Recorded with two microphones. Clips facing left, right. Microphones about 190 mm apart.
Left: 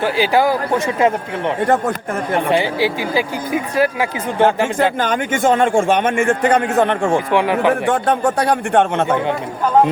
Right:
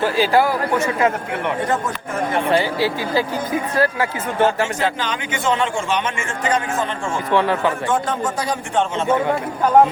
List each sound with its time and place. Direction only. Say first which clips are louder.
0.0 s speech: left 1 dB; 15° left (ahead or behind)
2.5 s speech: left 1 dB; 15° left (ahead or behind)
4.9 s a man's voice: left 7 dB; 50° left (ahead or behind)
7.3 s speech: left 2 dB; 15° left (ahead or behind)
7.7 s a man's voice: left 5 dB; 65° left (ahead or behind)